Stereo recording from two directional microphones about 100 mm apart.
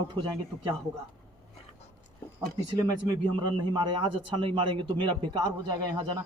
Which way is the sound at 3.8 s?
55° right (ahead or behind).